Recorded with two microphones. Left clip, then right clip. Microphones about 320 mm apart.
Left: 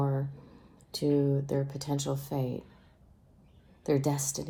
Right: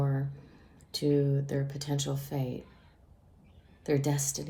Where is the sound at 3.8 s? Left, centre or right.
Centre.